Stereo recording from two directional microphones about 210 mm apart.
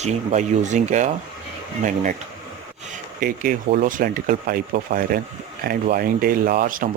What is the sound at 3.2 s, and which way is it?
Speech, 40° right (ahead or behind).